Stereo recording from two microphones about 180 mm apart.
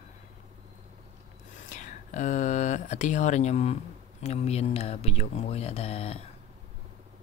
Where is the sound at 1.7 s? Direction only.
45° left (ahead or behind).